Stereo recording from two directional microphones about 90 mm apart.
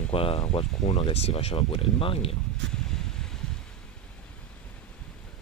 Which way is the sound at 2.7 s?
5° left (ahead or behind).